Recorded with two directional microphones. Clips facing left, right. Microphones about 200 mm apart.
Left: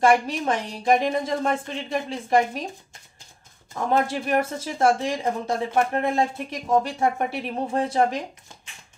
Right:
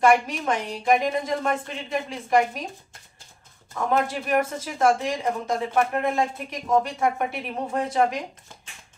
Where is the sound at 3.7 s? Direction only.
30° left (ahead or behind).